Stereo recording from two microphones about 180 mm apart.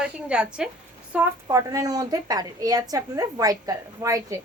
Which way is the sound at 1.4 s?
20° right (ahead or behind).